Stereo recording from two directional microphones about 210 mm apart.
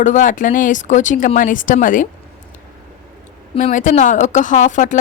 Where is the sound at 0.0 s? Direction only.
35° left (ahead or behind).